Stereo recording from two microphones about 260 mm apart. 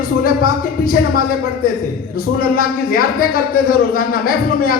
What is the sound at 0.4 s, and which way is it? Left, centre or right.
A man's voice, left.